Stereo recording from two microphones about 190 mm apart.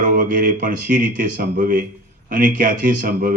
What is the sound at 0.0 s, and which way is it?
Mantra, 45° right (ahead or behind).